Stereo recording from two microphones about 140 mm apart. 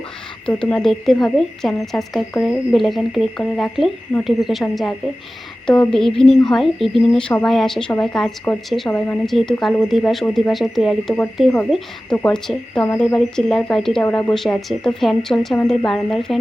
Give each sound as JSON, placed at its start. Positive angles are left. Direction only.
{"t": 0.4, "sound": "speech", "side_deg": 5}